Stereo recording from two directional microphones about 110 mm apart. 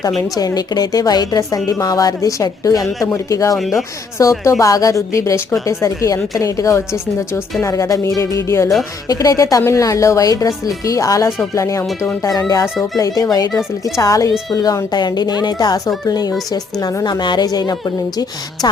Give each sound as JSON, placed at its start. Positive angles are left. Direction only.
{"t": 0.3, "sound": "a woman's voice", "side_deg": 35}
{"t": 3.5, "sound": "speech", "side_deg": 0}
{"t": 4.2, "sound": "a woman's voice", "side_deg": 30}